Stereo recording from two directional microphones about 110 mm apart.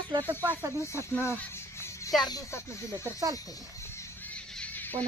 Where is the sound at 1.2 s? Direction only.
20° left (ahead or behind).